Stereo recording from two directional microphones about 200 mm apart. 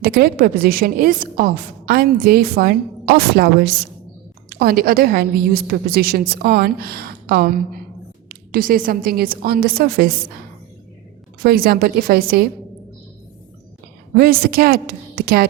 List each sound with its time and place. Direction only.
0.0 s a woman's voice: 50° right (ahead or behind)
11.4 s a woman's voice: 50° right (ahead or behind)
14.2 s a woman's voice: 50° right (ahead or behind)